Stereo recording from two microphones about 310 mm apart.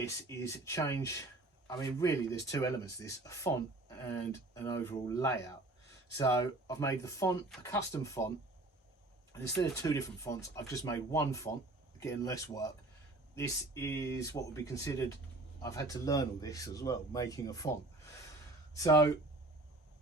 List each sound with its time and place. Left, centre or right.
0.0 s speech: centre
9.3 s speech: centre
18.7 s speech: centre